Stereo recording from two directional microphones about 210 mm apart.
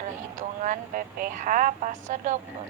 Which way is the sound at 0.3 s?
35° right (ahead or behind).